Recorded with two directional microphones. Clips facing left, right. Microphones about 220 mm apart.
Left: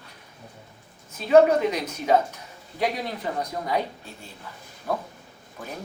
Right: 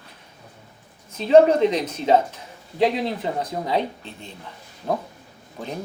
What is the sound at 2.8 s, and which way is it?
Speech, 25° right (ahead or behind).